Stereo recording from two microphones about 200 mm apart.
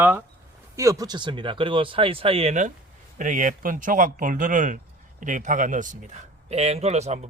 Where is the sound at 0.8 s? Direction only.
15° right (ahead or behind).